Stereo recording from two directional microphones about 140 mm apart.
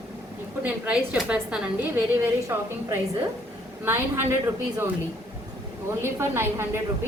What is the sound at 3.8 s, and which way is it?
Speech, 20° right (ahead or behind).